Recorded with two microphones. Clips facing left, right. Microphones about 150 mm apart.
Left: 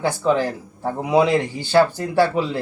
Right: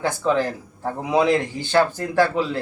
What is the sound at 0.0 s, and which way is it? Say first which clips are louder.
Speech: left 2 dB; 15° left (ahead or behind).